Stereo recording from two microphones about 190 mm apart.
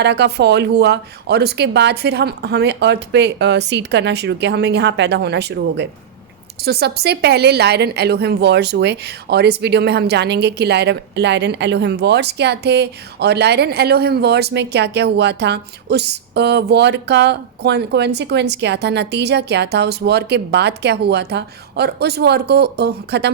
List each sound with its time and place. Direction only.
0.0 s a woman's voice: 60° right (ahead or behind)